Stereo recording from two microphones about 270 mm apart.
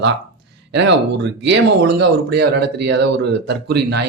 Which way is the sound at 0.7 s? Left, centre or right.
Right.